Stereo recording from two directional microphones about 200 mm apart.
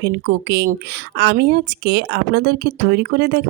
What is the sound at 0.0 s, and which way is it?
Speech, 55° right (ahead or behind).